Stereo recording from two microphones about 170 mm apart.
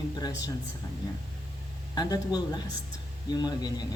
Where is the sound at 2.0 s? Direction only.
20° left (ahead or behind).